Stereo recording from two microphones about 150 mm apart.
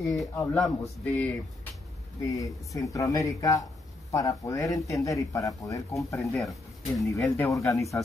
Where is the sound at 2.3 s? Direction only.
20° left (ahead or behind).